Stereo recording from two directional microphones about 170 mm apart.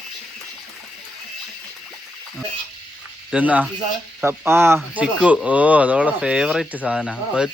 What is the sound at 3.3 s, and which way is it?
Speech, 10° right (ahead or behind).